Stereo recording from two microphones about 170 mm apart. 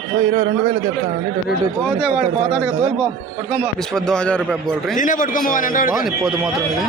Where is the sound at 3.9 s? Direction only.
5° left (ahead or behind).